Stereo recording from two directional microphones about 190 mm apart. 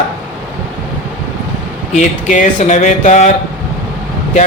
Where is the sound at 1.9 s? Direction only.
40° left (ahead or behind).